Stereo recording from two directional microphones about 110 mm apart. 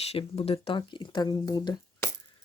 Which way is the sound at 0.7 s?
50° left (ahead or behind).